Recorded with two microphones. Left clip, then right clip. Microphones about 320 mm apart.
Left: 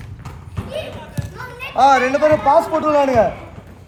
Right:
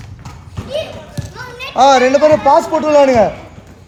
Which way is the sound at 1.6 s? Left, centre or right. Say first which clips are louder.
Right 4 dB; centre.